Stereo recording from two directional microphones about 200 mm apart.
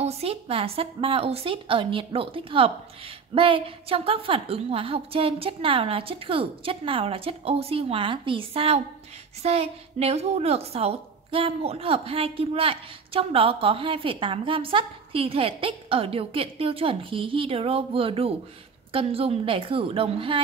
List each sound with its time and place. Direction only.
0.0 s a woman's voice: 30° right (ahead or behind)